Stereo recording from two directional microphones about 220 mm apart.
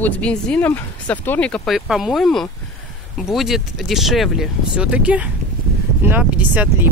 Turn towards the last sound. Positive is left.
turn(degrees=-10)  # may be behind; listen again after turning